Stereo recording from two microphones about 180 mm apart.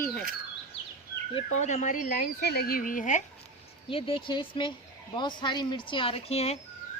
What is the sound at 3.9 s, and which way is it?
Speech, 30° left (ahead or behind).